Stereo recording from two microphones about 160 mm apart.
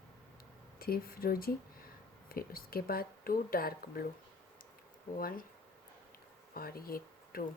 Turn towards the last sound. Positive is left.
turn(degrees=65)  # may be behind; listen again after turning